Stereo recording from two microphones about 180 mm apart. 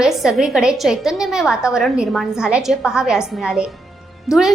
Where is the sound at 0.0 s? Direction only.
5° right (ahead or behind).